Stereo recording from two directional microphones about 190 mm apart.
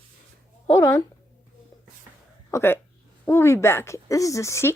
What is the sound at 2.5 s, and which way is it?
A woman's voice, 15° left (ahead or behind).